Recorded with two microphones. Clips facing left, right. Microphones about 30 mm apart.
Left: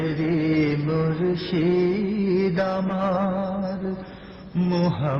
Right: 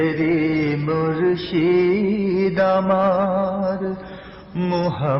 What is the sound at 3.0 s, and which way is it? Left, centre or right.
Music, centre.